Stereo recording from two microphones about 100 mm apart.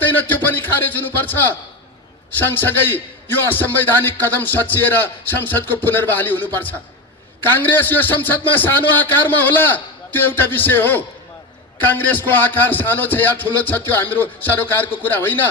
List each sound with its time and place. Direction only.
0.0 s a man's voice: 20° left (ahead or behind)